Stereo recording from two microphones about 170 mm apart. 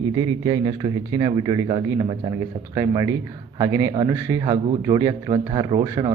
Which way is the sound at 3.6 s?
20° right (ahead or behind).